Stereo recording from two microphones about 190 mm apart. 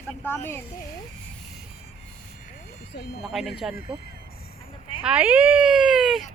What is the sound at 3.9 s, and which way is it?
Speech, 30° right (ahead or behind).